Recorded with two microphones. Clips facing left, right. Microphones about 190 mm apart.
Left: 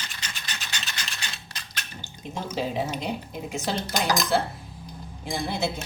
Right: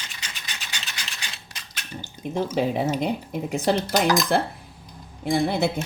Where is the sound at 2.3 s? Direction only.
55° right (ahead or behind).